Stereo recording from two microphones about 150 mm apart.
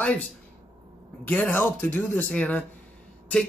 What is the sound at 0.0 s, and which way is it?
A man's voice, 10° left (ahead or behind).